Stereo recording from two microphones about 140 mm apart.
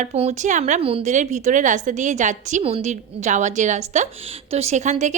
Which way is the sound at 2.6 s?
50° right (ahead or behind).